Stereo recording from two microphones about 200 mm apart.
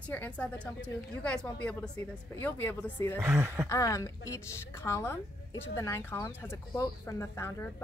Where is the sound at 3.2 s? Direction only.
15° right (ahead or behind).